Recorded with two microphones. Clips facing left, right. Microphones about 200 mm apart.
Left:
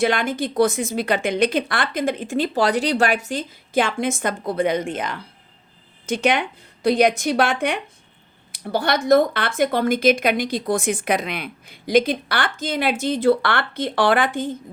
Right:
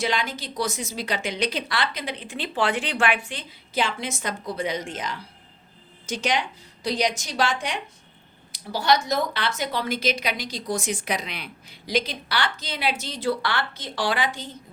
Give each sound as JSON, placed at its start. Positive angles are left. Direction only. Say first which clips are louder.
{"t": 0.0, "sound": "a woman's voice", "louder": "left 7 dB", "side_deg": 55}